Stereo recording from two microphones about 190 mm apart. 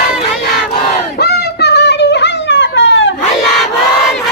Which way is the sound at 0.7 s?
60° left (ahead or behind).